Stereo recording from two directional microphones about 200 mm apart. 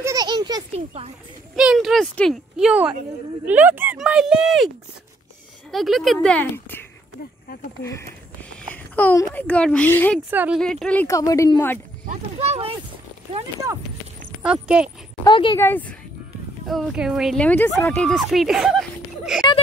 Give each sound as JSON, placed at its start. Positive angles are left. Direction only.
{"t": 0.0, "sound": "a sound", "side_deg": -20}
{"t": 0.7, "sound": "speech", "side_deg": -30}
{"t": 1.5, "sound": "speech", "side_deg": 0}
{"t": 5.7, "sound": "speech", "side_deg": 0}
{"t": 7.8, "sound": "speech", "side_deg": 15}
{"t": 10.3, "sound": "speech", "side_deg": -10}
{"t": 10.6, "sound": "speech", "side_deg": 5}
{"t": 12.1, "sound": "speech", "side_deg": -30}
{"t": 14.4, "sound": "speech", "side_deg": -5}
{"t": 15.2, "sound": "speech", "side_deg": 20}
{"t": 15.6, "sound": "speech", "side_deg": 10}
{"t": 16.6, "sound": "speech", "side_deg": 0}